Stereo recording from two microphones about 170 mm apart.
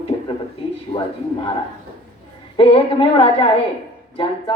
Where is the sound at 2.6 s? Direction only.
35° left (ahead or behind).